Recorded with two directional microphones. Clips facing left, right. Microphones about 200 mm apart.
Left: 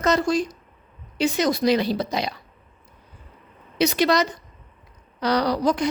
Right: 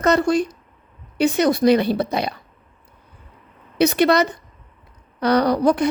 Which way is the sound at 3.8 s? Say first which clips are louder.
Right 4 dB; 60° right (ahead or behind).